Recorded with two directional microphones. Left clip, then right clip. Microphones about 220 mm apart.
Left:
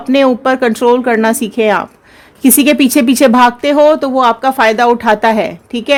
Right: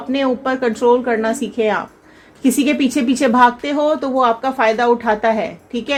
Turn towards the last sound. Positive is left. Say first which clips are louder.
# left 8 dB
turn(degrees=45)  # may be behind; listen again after turning